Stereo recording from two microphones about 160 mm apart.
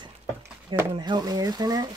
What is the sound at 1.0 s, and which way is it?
Speech, 25° right (ahead or behind).